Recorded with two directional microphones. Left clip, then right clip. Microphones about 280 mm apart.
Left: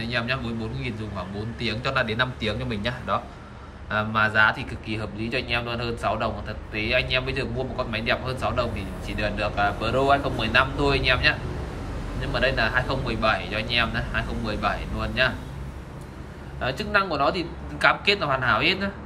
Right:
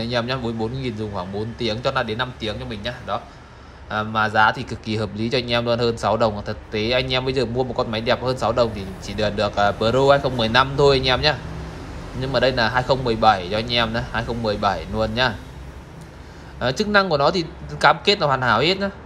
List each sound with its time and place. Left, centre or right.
0.0 s a man's voice: centre
16.5 s a man's voice: right